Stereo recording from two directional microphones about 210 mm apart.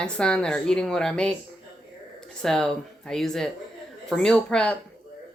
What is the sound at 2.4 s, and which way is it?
Speech, centre (ahead or behind).